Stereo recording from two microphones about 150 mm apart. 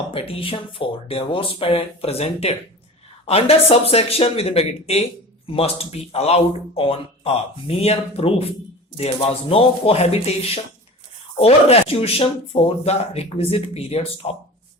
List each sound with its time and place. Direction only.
0.1 s speech: 40° left (ahead or behind)